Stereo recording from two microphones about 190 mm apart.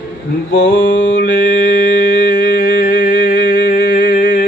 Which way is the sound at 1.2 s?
55° left (ahead or behind).